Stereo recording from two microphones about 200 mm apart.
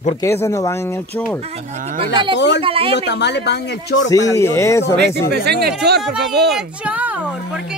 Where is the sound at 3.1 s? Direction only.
60° left (ahead or behind).